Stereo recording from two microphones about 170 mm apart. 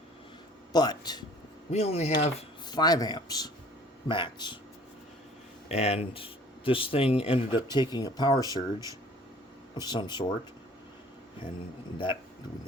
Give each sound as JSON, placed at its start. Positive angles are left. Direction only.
{"t": 0.7, "sound": "speech", "side_deg": 25}
{"t": 1.7, "sound": "speech", "side_deg": 40}
{"t": 2.6, "sound": "speech", "side_deg": 25}
{"t": 5.6, "sound": "speech", "side_deg": 40}